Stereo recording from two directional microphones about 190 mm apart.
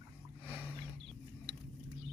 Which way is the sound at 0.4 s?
10° right (ahead or behind).